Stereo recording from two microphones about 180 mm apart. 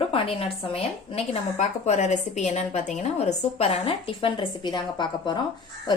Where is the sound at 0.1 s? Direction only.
30° left (ahead or behind).